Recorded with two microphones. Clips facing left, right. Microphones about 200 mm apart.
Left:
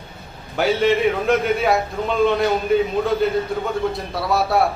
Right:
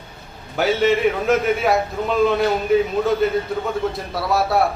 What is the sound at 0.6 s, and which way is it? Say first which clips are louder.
A man's voice: even; centre (ahead or behind).